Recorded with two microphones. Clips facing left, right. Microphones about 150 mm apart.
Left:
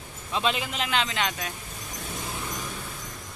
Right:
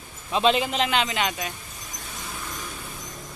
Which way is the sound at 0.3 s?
25° right (ahead or behind).